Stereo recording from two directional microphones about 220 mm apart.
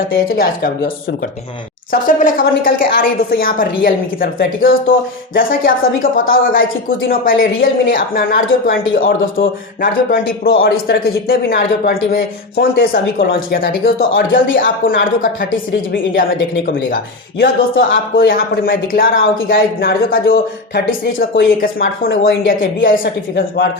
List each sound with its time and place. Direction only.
0.1 s speech: 40° left (ahead or behind)
1.9 s speech: 40° left (ahead or behind)
9.4 s a man's voice: 60° left (ahead or behind)
9.8 s a man's voice: 45° left (ahead or behind)
17.4 s a man's voice: 45° left (ahead or behind)